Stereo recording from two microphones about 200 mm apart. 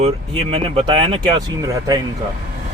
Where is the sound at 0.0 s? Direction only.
30° right (ahead or behind).